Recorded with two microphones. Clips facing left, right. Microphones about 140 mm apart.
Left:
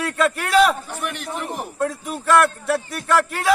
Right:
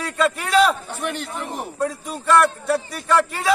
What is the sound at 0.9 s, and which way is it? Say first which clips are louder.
Speech: right 2 dB; 30° right (ahead or behind).